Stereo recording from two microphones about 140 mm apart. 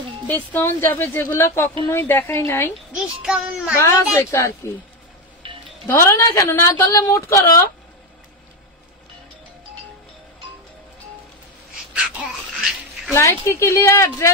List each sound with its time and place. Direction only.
0.5 s a woman's voice: 15° left (ahead or behind)
2.9 s a child's voice: 5° right (ahead or behind)
3.7 s speech: 20° left (ahead or behind)
5.9 s speech: 20° left (ahead or behind)
11.9 s a sound: 5° right (ahead or behind)
13.1 s speech: 20° left (ahead or behind)